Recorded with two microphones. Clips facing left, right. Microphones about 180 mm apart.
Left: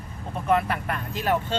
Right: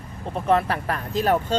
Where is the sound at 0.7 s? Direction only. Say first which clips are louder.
Right 3 dB; 40° right (ahead or behind).